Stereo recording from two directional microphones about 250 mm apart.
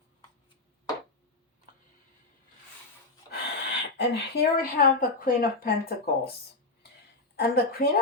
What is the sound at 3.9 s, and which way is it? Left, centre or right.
Speech, left.